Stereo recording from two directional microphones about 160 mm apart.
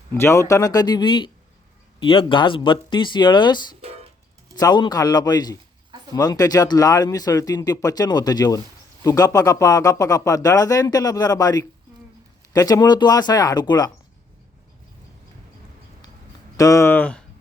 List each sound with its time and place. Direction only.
0.1 s speech: 15° left (ahead or behind)
16.6 s speech: 20° left (ahead or behind)